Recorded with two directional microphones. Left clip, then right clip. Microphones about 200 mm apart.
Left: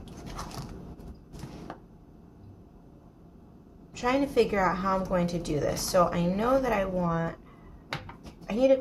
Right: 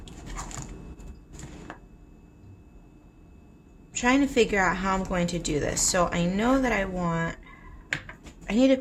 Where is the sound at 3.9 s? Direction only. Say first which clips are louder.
Right 2 dB; 35° right (ahead or behind).